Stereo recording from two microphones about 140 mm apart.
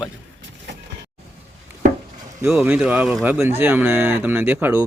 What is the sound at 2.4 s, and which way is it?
Speech, 15° right (ahead or behind).